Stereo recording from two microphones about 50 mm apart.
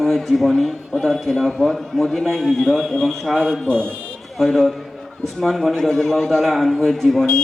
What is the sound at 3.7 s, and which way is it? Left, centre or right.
Speech, centre.